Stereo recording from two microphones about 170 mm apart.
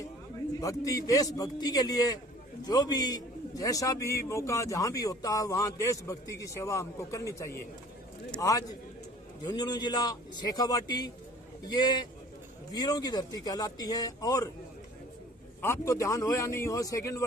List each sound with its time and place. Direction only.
0.6 s a man's voice: 20° left (ahead or behind)
15.6 s a man's voice: 15° left (ahead or behind)